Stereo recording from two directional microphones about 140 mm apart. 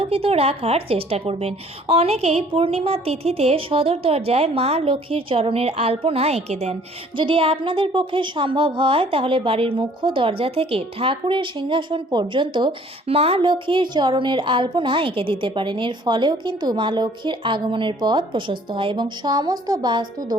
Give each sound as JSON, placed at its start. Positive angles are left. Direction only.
{"t": 0.0, "sound": "a woman's voice", "side_deg": -45}
{"t": 7.2, "sound": "a woman's voice", "side_deg": -40}